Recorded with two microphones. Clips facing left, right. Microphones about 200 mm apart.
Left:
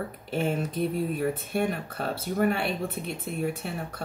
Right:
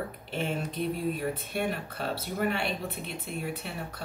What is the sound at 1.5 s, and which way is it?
Speech, 45° left (ahead or behind).